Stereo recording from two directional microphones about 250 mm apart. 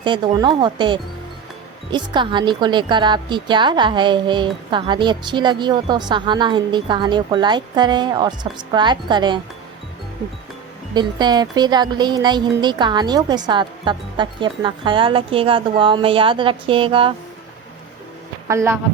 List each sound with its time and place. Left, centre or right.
0.0 s a woman's voice: centre
10.9 s speech: centre
18.4 s a woman's voice: centre